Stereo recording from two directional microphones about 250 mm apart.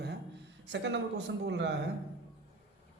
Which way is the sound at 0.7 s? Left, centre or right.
Right.